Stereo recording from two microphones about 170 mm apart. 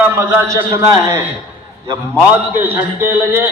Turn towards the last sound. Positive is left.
turn(degrees=-15)  # may be behind; listen again after turning